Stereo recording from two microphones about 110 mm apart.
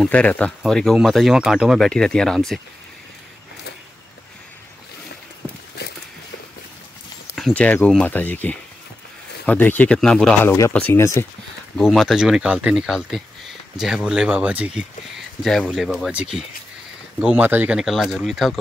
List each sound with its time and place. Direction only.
0.0 s speech: 10° left (ahead or behind)
7.5 s speech: 10° left (ahead or behind)
9.9 s speech: 5° left (ahead or behind)
10.4 s speech: 25° left (ahead or behind)
10.7 s speech: 15° left (ahead or behind)
11.0 s speech: 25° left (ahead or behind)
11.8 s speech: centre (ahead or behind)
14.8 s speech: centre (ahead or behind); by 17.7 s 15° right (ahead or behind)
17.7 s speech: centre (ahead or behind)